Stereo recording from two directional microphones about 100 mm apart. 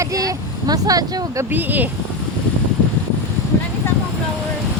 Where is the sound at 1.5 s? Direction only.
20° right (ahead or behind).